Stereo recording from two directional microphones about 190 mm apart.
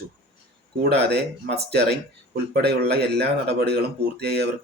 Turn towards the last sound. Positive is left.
turn(degrees=-60)  # may be behind; listen again after turning